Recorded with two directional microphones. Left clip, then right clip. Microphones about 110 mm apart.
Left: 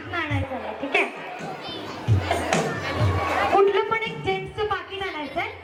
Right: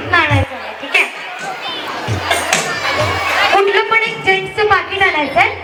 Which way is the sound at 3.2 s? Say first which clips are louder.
Right 5 dB; 25° right (ahead or behind).